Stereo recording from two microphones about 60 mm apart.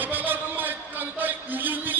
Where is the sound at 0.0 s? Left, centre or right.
Right.